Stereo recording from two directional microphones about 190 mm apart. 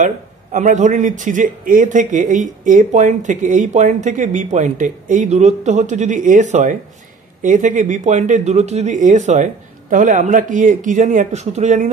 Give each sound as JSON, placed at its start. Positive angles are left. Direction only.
{"t": 0.0, "sound": "a man's voice", "side_deg": -40}